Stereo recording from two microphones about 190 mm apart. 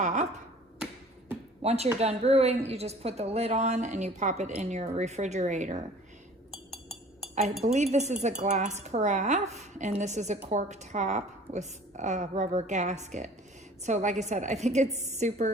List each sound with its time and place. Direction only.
0.0 s speech: 40° right (ahead or behind)
1.6 s a woman's voice: 35° right (ahead or behind)
7.3 s a woman's voice: 35° right (ahead or behind)